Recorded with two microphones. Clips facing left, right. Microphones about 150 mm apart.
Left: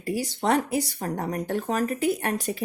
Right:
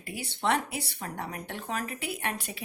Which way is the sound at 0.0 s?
40° left (ahead or behind).